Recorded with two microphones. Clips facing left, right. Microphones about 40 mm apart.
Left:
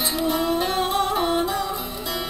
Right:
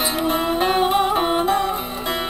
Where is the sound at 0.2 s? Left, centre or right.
Right.